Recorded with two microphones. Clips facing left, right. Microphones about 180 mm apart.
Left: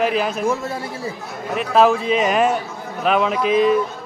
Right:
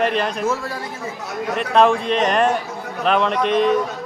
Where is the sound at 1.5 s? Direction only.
5° left (ahead or behind).